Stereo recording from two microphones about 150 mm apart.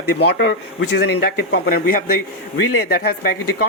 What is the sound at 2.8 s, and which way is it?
Speech, 90° left.